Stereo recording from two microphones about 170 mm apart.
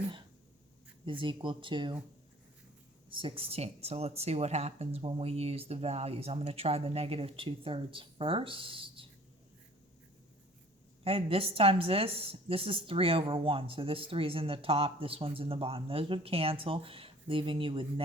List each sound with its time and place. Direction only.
1.0 s speech: 30° right (ahead or behind)
3.1 s a woman's voice: 30° right (ahead or behind)
11.0 s a woman's voice: 35° right (ahead or behind)